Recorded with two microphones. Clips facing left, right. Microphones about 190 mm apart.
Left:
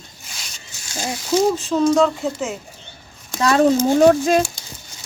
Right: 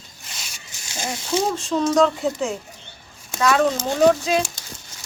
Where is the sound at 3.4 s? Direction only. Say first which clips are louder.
Left 4 dB; 35° left (ahead or behind).